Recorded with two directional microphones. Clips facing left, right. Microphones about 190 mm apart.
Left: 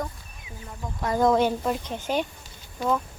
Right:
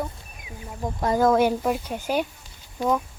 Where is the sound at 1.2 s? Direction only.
5° right (ahead or behind).